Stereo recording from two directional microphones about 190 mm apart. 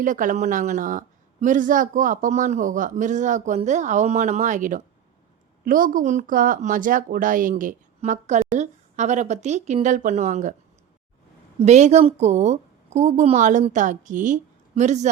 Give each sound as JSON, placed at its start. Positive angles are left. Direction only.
{"t": 0.0, "sound": "speech", "side_deg": -45}
{"t": 11.6, "sound": "speech", "side_deg": -35}